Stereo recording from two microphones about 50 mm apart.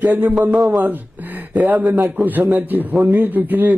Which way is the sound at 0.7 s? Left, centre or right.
Right.